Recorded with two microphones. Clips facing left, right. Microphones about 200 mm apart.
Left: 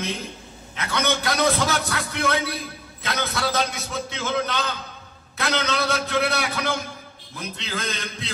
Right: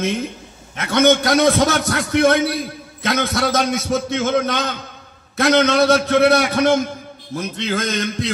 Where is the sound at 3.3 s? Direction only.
45° right (ahead or behind).